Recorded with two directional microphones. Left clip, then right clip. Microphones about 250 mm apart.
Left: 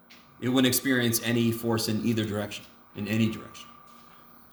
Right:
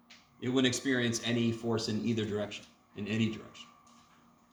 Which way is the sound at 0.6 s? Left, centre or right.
Left.